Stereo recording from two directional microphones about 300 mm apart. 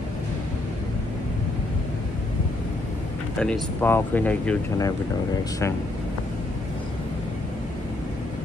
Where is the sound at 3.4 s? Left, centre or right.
Centre.